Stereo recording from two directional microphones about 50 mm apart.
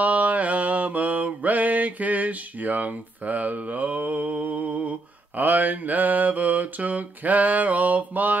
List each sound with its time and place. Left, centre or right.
0.0 s mantra: right